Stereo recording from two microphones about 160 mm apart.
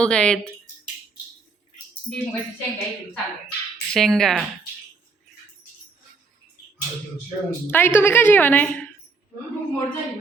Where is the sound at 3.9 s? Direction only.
5° left (ahead or behind).